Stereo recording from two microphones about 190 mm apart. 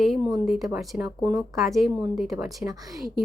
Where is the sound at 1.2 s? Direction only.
15° right (ahead or behind).